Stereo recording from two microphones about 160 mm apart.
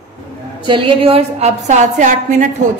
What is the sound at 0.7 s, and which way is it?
A woman's voice, 35° right (ahead or behind).